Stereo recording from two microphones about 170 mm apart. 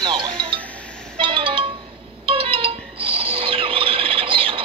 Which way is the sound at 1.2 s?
30° right (ahead or behind).